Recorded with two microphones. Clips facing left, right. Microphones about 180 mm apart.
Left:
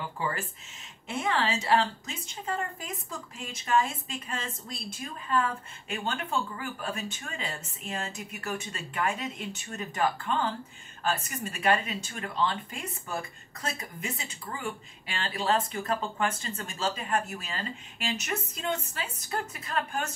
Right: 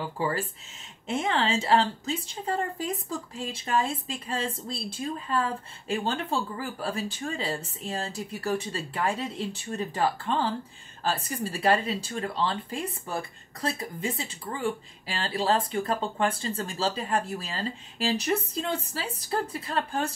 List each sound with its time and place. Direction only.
0.2 s a woman's voice: 30° right (ahead or behind)